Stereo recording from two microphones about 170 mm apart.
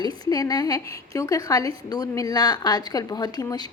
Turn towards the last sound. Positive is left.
turn(degrees=25)  # may be behind; listen again after turning